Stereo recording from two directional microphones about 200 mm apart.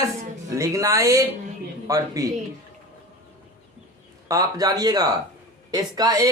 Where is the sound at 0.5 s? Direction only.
15° right (ahead or behind).